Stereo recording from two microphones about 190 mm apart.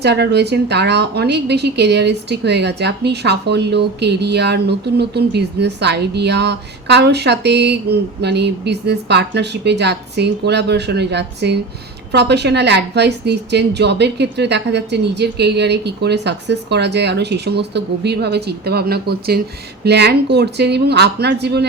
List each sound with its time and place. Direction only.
0.0 s a woman's voice: 60° right (ahead or behind)